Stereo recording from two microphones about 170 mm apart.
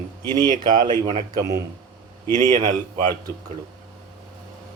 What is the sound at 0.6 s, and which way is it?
Speech, 25° right (ahead or behind).